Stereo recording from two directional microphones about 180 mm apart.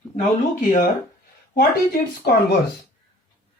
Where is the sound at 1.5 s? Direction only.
60° left (ahead or behind).